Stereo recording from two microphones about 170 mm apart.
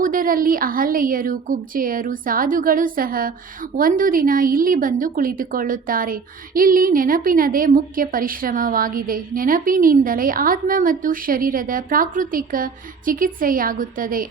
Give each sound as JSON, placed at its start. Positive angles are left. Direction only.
{"t": 0.0, "sound": "a woman's voice", "side_deg": -55}